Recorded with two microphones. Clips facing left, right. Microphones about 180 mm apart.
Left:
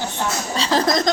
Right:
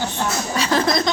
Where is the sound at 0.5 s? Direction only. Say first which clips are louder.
Left 1 dB; 30° left (ahead or behind).